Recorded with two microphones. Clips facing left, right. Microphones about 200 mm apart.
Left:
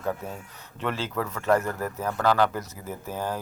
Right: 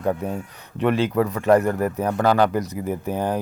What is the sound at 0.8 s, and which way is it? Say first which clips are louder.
Speech: right 10 dB; 15° right (ahead or behind).